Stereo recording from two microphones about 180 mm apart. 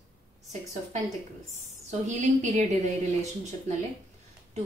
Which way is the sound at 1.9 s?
40° right (ahead or behind).